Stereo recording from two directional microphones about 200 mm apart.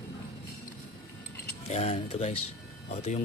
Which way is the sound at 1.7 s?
30° left (ahead or behind).